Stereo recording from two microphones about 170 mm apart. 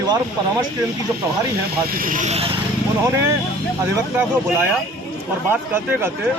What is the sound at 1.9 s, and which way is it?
Speech, 55° right (ahead or behind).